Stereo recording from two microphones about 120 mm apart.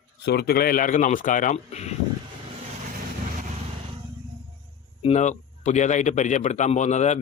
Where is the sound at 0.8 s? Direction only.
90° left; by 1.9 s 70° left (ahead or behind).